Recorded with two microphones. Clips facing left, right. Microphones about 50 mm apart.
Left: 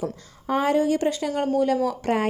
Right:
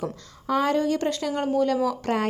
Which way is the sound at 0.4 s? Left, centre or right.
Left.